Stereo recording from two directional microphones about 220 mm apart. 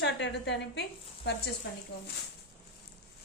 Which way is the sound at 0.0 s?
55° left (ahead or behind).